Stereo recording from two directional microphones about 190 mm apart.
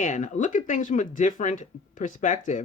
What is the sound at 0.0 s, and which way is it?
Speech, 45° left (ahead or behind).